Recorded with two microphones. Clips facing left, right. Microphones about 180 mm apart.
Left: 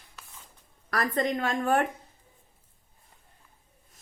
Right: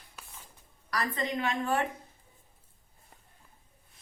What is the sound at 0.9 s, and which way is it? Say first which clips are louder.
Speech: left 5 dB; 50° left (ahead or behind).